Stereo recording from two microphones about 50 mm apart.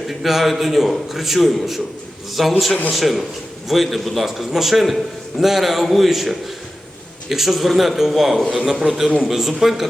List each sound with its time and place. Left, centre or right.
0.1 s a man's voice: centre